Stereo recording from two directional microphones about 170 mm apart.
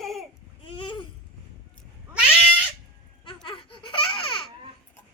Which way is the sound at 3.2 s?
30° left (ahead or behind).